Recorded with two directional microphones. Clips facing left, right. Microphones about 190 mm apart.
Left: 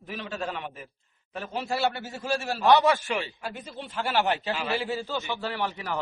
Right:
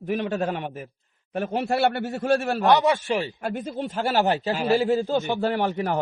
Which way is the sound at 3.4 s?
50° right (ahead or behind).